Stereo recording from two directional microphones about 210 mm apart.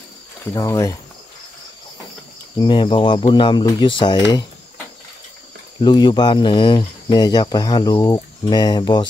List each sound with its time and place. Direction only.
0.5 s speech: 15° left (ahead or behind)
2.5 s speech: 20° left (ahead or behind)
5.8 s speech: 20° left (ahead or behind)